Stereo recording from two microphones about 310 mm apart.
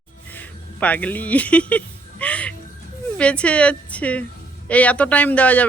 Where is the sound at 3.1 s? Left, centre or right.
Centre.